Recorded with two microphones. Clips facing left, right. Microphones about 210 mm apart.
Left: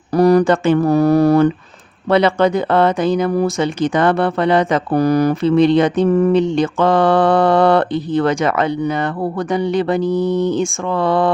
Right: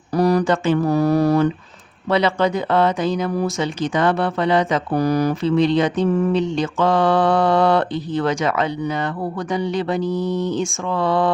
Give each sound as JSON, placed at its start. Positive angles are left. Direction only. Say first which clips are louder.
{"t": 0.1, "sound": "speech", "louder": "left 5 dB", "side_deg": 55}